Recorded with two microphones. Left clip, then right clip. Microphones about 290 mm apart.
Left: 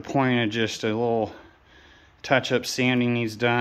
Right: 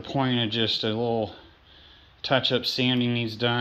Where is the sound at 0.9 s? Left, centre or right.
Left.